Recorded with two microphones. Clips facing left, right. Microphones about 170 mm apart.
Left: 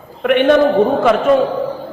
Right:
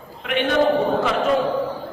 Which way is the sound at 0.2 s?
55° left (ahead or behind).